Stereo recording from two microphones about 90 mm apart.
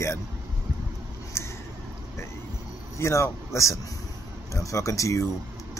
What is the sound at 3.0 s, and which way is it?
Speech, 35° left (ahead or behind).